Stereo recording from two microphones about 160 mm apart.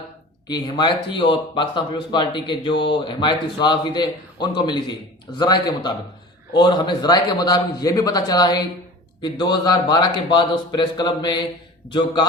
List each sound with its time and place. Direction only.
0.4 s a man's voice: 25° left (ahead or behind)